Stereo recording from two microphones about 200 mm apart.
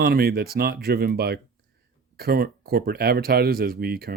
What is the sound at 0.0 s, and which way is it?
Speech, 50° right (ahead or behind).